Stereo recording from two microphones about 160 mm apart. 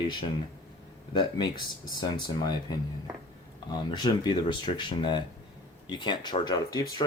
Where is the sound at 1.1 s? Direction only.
30° left (ahead or behind).